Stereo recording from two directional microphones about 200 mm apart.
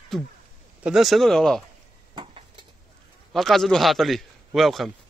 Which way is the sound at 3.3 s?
Centre (ahead or behind).